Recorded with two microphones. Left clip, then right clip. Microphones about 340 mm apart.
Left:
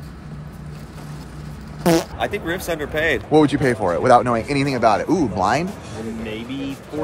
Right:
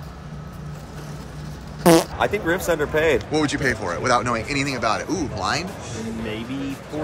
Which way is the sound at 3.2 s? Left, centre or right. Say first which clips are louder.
Left 6 dB; centre.